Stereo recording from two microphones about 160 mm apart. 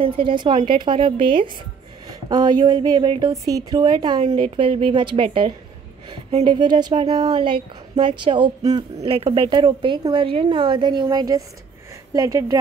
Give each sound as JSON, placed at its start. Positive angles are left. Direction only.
{"t": 0.0, "sound": "a woman's voice", "side_deg": -30}